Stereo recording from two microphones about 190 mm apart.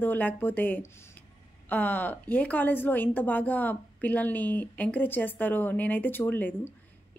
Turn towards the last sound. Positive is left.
turn(degrees=10)  # may be behind; listen again after turning